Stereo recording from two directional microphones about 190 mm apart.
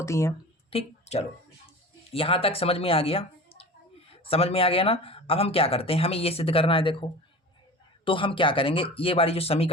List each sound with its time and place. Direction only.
0.0 s speech: 15° left (ahead or behind)
0.7 s a sound: 35° left (ahead or behind)
2.1 s speech: 30° left (ahead or behind)